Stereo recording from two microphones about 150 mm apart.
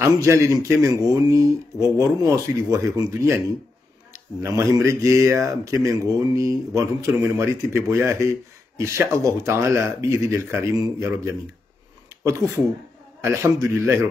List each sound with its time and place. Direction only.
0.0 s speech: 20° right (ahead or behind)